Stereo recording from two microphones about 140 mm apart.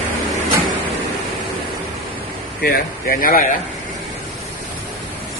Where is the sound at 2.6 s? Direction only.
90° left.